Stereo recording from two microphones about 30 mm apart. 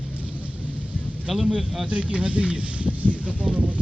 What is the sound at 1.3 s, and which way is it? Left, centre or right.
Speech, centre.